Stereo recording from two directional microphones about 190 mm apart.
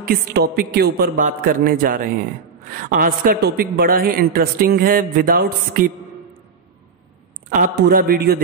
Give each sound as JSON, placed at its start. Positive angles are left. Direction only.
{"t": 0.0, "sound": "a man's voice", "side_deg": -55}
{"t": 7.4, "sound": "a man's voice", "side_deg": -45}